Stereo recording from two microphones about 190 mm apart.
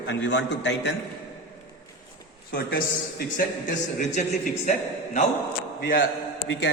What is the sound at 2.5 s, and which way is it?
Speech, 50° left (ahead or behind).